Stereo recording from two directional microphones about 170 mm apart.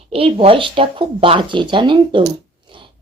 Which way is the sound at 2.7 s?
30° right (ahead or behind).